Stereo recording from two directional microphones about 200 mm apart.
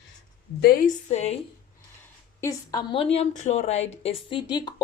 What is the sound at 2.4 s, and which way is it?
Speech, 20° left (ahead or behind).